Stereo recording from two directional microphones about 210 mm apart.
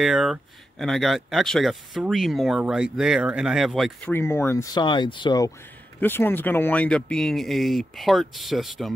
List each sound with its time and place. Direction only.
0.0 s speech: centre (ahead or behind)
4.1 s speech: 10° left (ahead or behind)
5.9 s speech: 10° left (ahead or behind)